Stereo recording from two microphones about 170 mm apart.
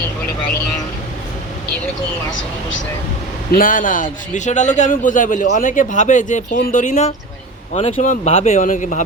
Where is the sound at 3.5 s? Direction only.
55° left (ahead or behind).